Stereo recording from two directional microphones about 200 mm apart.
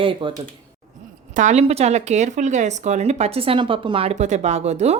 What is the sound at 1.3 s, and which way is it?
Speech, 35° right (ahead or behind).